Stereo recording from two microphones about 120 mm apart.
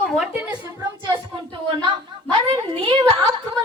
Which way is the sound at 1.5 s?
40° right (ahead or behind).